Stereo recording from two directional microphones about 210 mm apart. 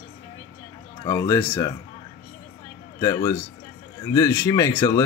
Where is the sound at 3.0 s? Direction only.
15° left (ahead or behind).